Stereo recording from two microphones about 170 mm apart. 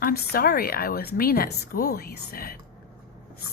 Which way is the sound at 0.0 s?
60° left (ahead or behind).